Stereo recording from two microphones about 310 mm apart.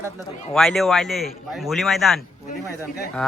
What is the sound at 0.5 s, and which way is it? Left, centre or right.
Speech, centre.